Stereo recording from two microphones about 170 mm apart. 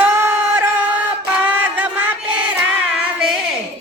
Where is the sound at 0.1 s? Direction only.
15° right (ahead or behind).